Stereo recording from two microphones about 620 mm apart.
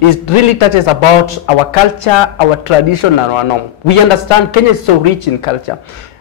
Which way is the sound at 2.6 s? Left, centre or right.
Left.